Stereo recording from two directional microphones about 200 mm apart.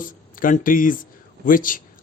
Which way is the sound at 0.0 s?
40° left (ahead or behind).